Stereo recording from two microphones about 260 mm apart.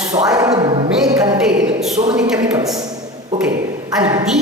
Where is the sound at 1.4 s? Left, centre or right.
Centre.